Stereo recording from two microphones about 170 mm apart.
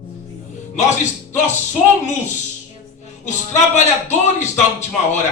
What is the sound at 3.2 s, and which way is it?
A man's voice, 45° left (ahead or behind).